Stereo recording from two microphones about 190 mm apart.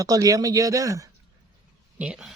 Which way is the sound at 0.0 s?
20° right (ahead or behind).